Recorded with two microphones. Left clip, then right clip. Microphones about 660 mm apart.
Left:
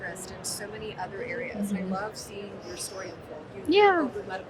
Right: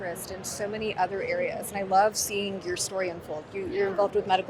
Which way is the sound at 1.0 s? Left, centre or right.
Right.